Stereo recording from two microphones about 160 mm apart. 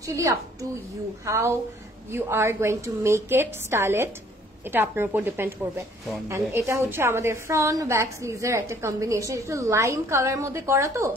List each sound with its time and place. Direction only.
0.0 s a woman's voice: 20° right (ahead or behind)